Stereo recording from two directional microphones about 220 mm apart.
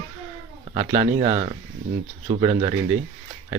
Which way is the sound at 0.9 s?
25° right (ahead or behind).